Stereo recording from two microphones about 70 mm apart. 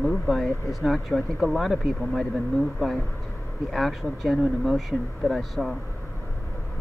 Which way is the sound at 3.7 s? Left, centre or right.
Centre.